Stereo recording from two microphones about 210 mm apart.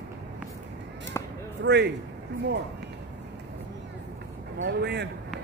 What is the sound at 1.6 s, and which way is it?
Speech, 55° right (ahead or behind).